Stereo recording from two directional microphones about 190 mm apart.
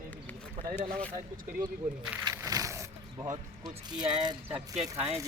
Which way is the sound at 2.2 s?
20° right (ahead or behind).